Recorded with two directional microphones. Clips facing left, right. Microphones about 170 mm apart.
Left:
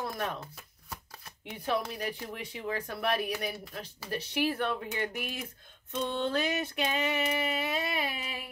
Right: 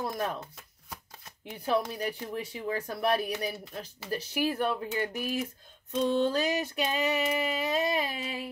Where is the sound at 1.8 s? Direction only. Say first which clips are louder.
Right 3 dB; 40° right (ahead or behind).